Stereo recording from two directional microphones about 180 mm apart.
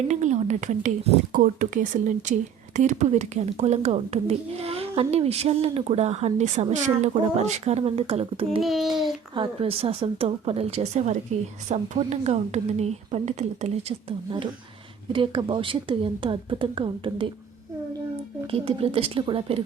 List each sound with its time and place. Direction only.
0.1 s a child's voice: 40° right (ahead or behind)
8.6 s a child's voice: centre (ahead or behind)
9.3 s a child's voice: 30° right (ahead or behind)
18.5 s a child's voice: 30° right (ahead or behind)